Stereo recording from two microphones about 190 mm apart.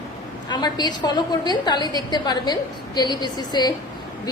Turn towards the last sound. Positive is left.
turn(degrees=20)  # may be behind; listen again after turning